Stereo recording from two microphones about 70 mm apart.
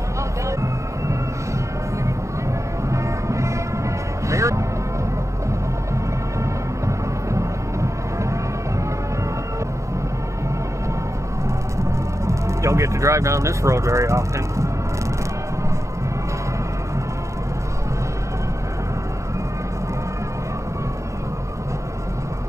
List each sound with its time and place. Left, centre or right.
0.5 s music: right
2.9 s music: right
7.3 s music: right
11.8 s speech: right